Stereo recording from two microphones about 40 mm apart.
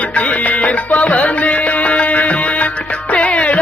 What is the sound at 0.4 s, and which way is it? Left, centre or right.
Music, left.